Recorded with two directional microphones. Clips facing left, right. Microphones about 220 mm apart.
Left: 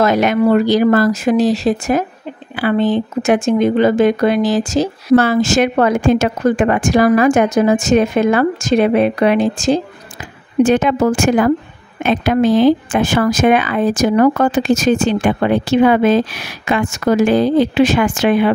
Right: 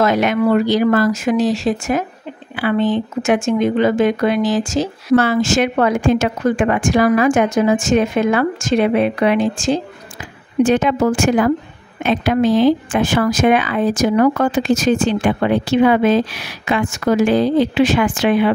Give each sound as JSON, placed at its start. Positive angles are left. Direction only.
{"t": 0.0, "sound": "speech", "side_deg": 40}